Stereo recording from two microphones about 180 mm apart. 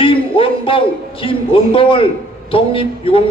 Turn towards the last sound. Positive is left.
turn(degrees=30)  # may be behind; listen again after turning